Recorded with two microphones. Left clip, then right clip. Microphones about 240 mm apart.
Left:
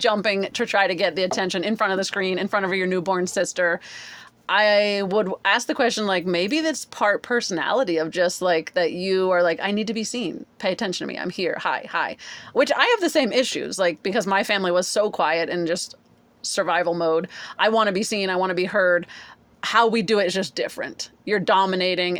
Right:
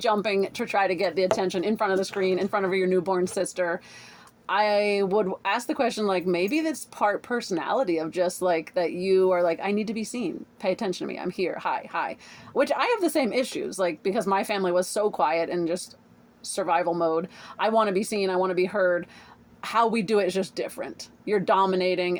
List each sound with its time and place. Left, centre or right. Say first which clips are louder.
0.5 s speech: left 4 dB; left